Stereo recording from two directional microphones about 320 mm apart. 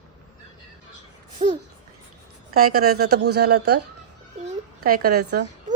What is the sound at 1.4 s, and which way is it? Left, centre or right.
Speech, centre.